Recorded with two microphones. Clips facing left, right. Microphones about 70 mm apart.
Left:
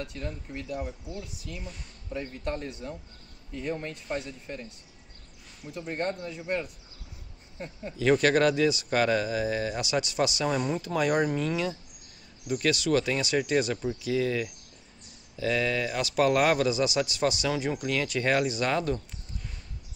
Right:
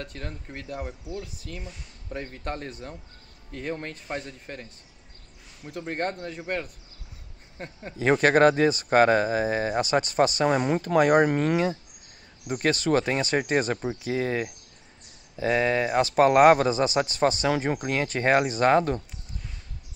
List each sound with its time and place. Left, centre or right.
0.0 s speech: right
2.1 s speech: right
5.7 s a man's voice: right